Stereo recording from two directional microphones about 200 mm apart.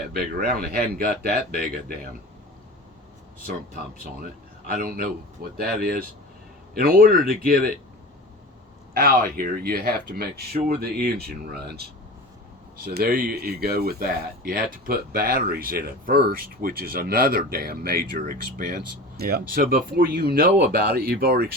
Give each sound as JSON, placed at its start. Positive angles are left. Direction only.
{"t": 0.1, "sound": "speech", "side_deg": -50}
{"t": 4.8, "sound": "speech", "side_deg": -45}
{"t": 8.9, "sound": "speech", "side_deg": -45}